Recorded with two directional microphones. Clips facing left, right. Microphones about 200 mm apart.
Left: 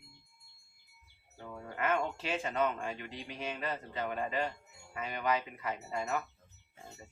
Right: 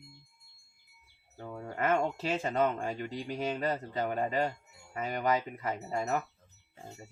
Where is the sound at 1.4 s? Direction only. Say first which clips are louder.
Right 3 dB; 35° right (ahead or behind).